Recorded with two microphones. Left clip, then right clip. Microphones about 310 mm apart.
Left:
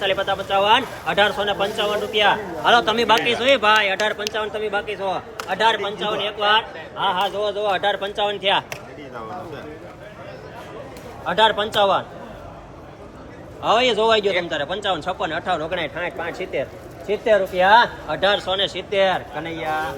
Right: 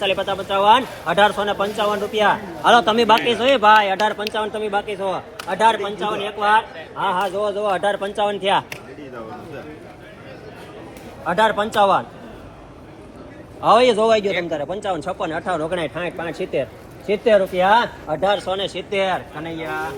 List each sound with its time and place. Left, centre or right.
0.0 s a man's voice: centre
11.3 s a man's voice: centre
13.6 s a man's voice: centre
17.3 s a man's voice: right; by 19.9 s centre